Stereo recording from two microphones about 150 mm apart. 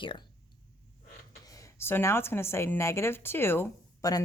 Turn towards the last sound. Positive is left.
turn(degrees=20)  # may be behind; listen again after turning